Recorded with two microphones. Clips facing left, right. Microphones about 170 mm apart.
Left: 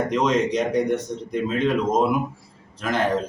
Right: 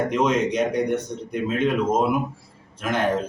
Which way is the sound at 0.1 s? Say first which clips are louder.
Even; 5° right (ahead or behind).